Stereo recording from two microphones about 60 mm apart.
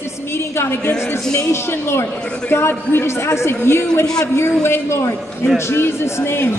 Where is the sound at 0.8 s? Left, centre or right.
Left.